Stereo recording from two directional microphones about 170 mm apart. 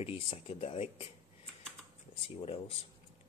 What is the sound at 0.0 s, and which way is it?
Speech, 30° left (ahead or behind).